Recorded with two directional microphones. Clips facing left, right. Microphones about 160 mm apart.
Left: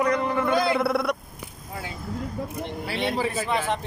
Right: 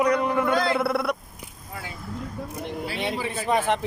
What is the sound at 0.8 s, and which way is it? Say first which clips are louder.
Speech: left 1 dB; centre (ahead or behind).